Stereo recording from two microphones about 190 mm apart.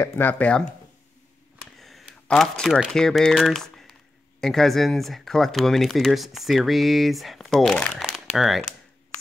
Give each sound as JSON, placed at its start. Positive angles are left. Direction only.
{"t": 0.0, "sound": "speech", "side_deg": 10}
{"t": 1.8, "sound": "speech", "side_deg": 0}